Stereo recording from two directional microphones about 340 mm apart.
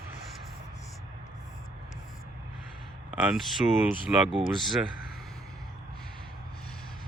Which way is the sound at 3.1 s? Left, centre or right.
Centre.